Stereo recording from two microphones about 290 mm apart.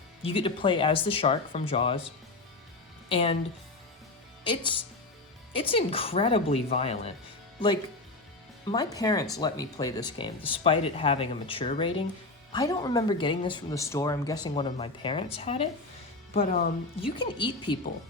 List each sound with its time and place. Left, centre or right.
0.2 s speech: centre
3.1 s speech: centre
4.4 s speech: centre
8.6 s speech: centre